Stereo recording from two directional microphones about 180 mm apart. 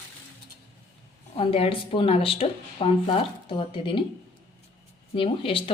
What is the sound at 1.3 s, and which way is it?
Speech, 30° left (ahead or behind).